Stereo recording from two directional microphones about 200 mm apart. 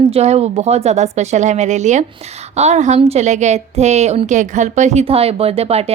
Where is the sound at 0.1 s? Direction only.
30° right (ahead or behind).